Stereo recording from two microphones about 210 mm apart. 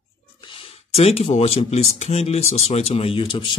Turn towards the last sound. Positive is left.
turn(degrees=25)  # may be behind; listen again after turning